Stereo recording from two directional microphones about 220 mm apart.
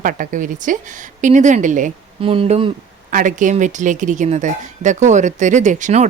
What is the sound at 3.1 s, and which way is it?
Speech, 35° right (ahead or behind).